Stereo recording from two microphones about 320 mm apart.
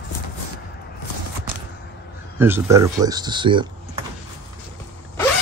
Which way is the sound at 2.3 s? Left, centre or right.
Centre.